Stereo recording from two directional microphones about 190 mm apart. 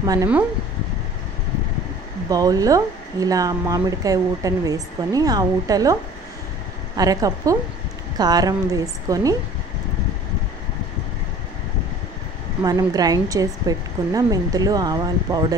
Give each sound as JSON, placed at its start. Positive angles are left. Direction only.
{"t": 0.0, "sound": "speech", "side_deg": -20}
{"t": 2.2, "sound": "speech", "side_deg": -20}
{"t": 7.0, "sound": "speech", "side_deg": -20}
{"t": 12.6, "sound": "speech", "side_deg": -20}